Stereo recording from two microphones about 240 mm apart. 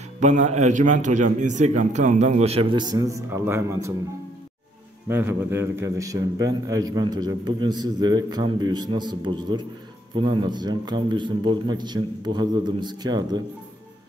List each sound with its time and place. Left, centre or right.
0.2 s a man's voice: right; by 3.9 s centre
5.0 s a man's voice: centre